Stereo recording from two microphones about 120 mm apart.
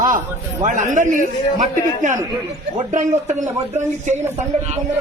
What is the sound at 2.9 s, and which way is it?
Speech, 90° right.